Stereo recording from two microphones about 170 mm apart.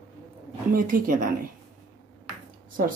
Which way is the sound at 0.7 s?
55° right (ahead or behind).